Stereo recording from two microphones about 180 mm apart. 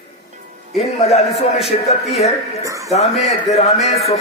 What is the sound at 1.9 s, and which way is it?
Speech, 35° left (ahead or behind).